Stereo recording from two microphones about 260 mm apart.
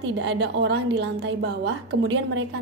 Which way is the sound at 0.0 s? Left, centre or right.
Right.